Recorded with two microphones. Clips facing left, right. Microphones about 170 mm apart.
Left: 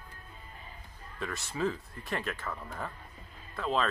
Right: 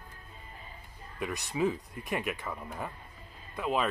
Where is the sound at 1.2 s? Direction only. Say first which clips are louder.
Right 3 dB; 15° right (ahead or behind).